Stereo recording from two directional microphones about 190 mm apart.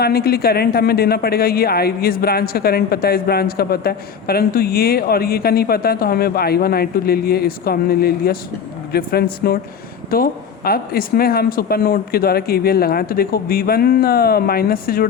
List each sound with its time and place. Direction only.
0.0 s speech: 55° left (ahead or behind)